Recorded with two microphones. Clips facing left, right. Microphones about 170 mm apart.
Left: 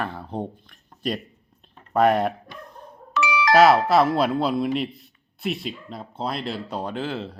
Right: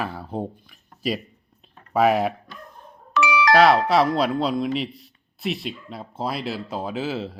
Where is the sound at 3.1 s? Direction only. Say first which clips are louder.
Right 2 dB; 65° right (ahead or behind).